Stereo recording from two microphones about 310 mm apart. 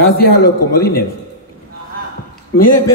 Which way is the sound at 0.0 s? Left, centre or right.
Left.